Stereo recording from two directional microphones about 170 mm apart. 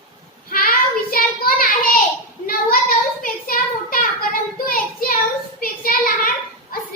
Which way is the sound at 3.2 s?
55° left (ahead or behind).